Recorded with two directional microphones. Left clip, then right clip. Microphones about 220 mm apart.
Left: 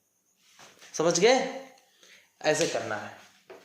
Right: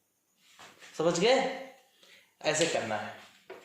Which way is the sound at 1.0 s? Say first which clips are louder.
Left 4 dB; 25° left (ahead or behind).